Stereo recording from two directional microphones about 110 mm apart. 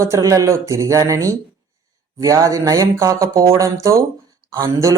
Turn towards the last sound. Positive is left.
turn(degrees=-30)  # may be behind; listen again after turning